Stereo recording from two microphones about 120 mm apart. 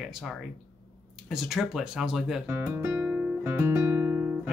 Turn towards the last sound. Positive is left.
turn(degrees=-15)  # may be behind; listen again after turning